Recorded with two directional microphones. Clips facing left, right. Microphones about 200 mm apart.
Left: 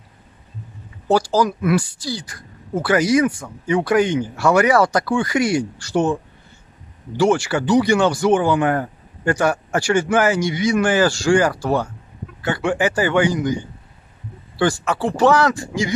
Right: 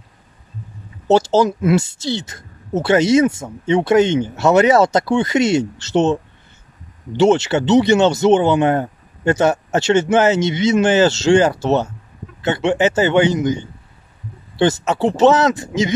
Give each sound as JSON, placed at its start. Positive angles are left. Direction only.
{"t": 1.0, "sound": "speech", "side_deg": -25}